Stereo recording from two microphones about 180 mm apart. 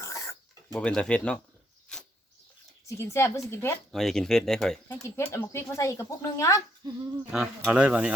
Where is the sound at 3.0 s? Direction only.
15° left (ahead or behind).